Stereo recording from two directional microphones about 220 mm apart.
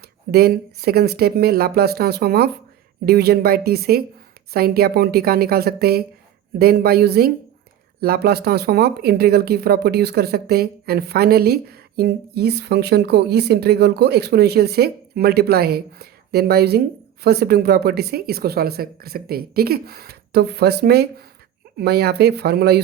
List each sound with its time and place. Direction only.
0.3 s speech: 45° right (ahead or behind)